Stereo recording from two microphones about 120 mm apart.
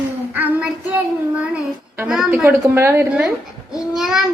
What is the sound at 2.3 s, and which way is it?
Speech, 15° right (ahead or behind).